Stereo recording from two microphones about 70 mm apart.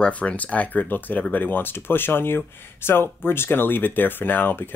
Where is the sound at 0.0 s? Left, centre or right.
Centre.